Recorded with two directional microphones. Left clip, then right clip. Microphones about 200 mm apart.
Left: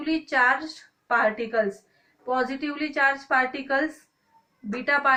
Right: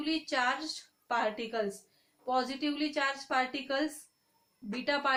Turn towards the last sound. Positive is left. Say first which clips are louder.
# left 9 dB
turn(degrees=-50)  # may be behind; listen again after turning